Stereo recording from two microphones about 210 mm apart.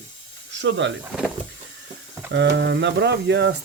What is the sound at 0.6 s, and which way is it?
Speech, 60° right (ahead or behind).